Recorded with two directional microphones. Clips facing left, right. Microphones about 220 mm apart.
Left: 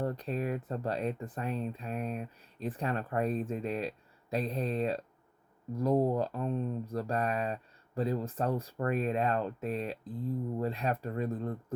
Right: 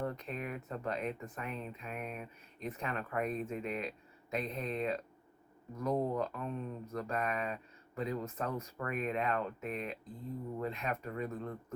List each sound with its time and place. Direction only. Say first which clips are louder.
0.0 s speech: left 6 dB; 35° left (ahead or behind)